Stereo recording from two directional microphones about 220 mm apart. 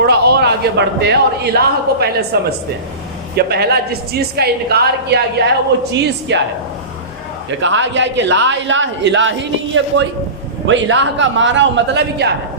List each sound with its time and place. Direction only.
0.0 s a man's voice: 45° right (ahead or behind)
7.6 s a man's voice: 55° right (ahead or behind)